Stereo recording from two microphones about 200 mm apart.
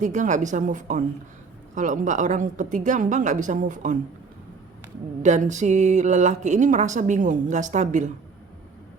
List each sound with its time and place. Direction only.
0.0 s speech: 40° right (ahead or behind)
5.2 s speech: 35° right (ahead or behind)